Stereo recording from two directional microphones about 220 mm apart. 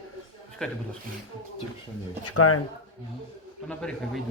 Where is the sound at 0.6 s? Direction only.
5° left (ahead or behind).